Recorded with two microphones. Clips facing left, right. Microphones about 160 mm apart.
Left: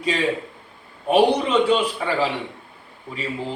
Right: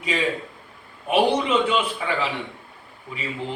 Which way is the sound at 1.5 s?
35° left (ahead or behind).